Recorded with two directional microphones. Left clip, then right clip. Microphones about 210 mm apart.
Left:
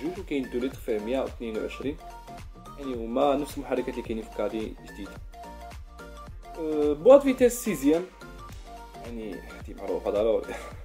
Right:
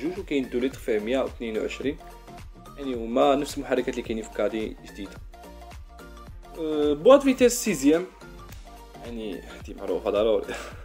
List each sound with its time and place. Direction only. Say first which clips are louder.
0.0 s speech: right 3 dB; centre (ahead or behind)
6.8 s speech: even; 5° right (ahead or behind)
9.2 s speech: right 3 dB; 15° right (ahead or behind)
9.8 s speech: right 2 dB; 5° right (ahead or behind)